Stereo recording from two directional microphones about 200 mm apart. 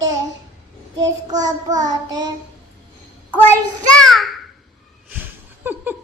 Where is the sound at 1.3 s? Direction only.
20° right (ahead or behind).